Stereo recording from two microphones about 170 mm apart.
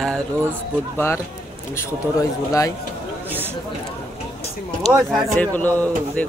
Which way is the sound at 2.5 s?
20° left (ahead or behind).